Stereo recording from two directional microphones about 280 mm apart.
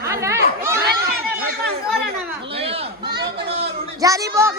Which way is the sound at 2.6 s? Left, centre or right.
Right.